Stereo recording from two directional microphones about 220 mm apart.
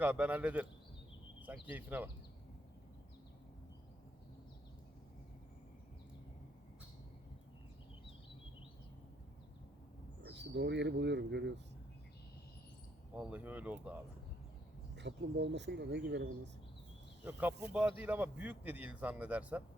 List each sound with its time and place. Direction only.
0.0 s a man's voice: 5° right (ahead or behind)
10.2 s speech: 50° right (ahead or behind)
13.1 s a man's voice: 5° right (ahead or behind)
14.9 s speech: 55° right (ahead or behind)
17.7 s a man's voice: 5° right (ahead or behind)